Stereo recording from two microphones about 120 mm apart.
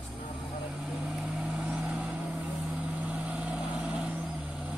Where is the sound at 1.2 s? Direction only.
5° right (ahead or behind).